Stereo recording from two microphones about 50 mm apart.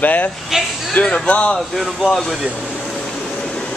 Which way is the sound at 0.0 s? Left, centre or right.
Left.